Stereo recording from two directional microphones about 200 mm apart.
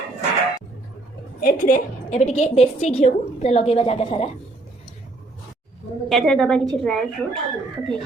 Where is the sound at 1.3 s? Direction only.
45° left (ahead or behind).